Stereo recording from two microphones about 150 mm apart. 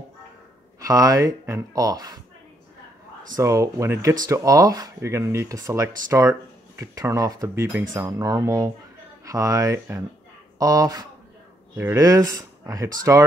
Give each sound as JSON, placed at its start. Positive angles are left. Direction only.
{"t": 0.7, "sound": "speech", "side_deg": -25}
{"t": 3.3, "sound": "speech", "side_deg": -20}